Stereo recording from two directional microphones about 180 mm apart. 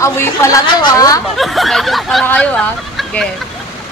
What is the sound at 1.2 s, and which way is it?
Speech, centre (ahead or behind).